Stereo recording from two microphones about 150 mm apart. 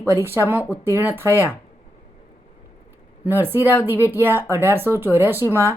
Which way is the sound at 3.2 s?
15° right (ahead or behind).